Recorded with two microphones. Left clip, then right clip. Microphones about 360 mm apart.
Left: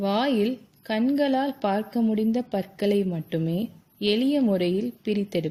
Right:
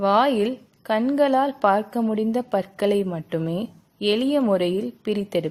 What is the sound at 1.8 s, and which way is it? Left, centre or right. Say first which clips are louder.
Speech: right 2 dB; right.